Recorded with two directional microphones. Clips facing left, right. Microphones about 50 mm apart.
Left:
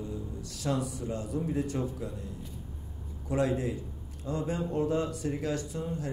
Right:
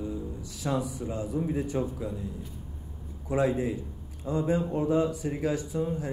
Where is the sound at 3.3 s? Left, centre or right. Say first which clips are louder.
Right 3 dB; centre.